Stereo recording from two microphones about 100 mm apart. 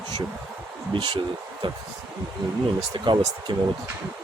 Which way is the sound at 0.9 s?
60° right (ahead or behind).